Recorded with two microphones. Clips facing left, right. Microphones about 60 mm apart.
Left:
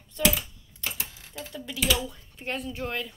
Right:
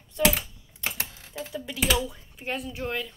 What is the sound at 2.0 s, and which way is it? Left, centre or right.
A woman's voice, centre.